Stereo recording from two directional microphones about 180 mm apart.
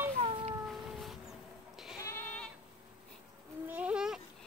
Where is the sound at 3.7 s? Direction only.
5° right (ahead or behind).